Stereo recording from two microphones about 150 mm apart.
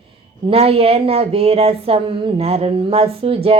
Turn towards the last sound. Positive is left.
turn(degrees=-40)  # may be behind; listen again after turning